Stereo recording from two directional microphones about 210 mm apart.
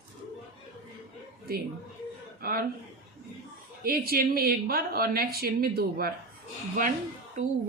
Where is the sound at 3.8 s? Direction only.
45° right (ahead or behind).